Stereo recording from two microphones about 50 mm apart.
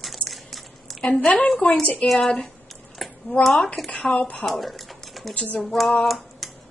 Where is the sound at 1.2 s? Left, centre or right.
Left.